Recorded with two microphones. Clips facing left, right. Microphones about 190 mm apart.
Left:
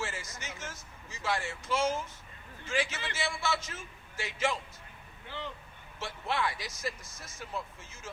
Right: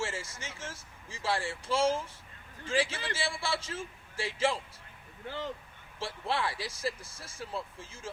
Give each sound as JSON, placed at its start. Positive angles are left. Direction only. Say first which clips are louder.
{"t": 0.0, "sound": "speech", "louder": "right 2 dB", "side_deg": -30}
{"t": 6.0, "sound": "speech", "louder": "even", "side_deg": -30}